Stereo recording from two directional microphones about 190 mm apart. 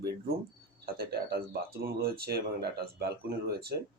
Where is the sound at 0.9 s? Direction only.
55° right (ahead or behind).